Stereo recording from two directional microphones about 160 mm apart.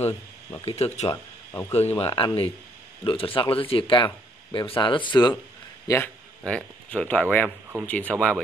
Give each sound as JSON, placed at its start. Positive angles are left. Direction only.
{"t": 0.7, "sound": "speech", "side_deg": 40}
{"t": 1.1, "sound": "speech", "side_deg": 15}
{"t": 1.7, "sound": "speech", "side_deg": 40}
{"t": 6.4, "sound": "speech", "side_deg": 5}